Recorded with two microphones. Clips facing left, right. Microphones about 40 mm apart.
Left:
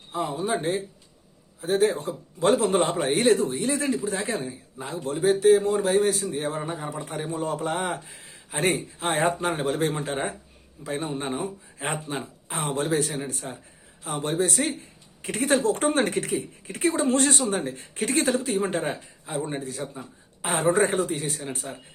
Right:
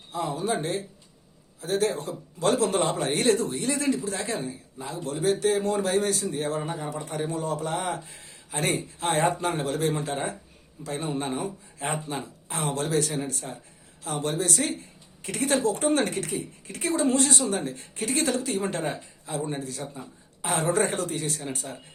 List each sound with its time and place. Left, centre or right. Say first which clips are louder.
0.1 s a man's voice: left 1 dB; left
3.1 s speech: left 4 dB; centre
4.8 s a woman's voice: left 3 dB; left
5.2 s speech: left 5 dB; centre
6.6 s speech: even; centre
6.8 s a man's voice: right 1 dB; left
9.6 s a woman's voice: left 1 dB; left
15.9 s a man's voice: left 1 dB; left
16.1 s a woman's voice: left 4 dB; left
17.6 s a man's voice: left 2 dB; left
17.9 s a woman's voice: left 3 dB; left
18.3 s speech: left 3 dB; centre
19.4 s a man's voice: left 2 dB; centre; by 21.8 s left